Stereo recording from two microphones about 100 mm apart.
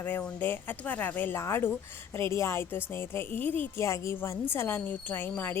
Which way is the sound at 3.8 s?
30° left (ahead or behind).